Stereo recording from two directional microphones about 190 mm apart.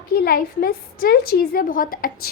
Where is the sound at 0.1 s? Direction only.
50° left (ahead or behind).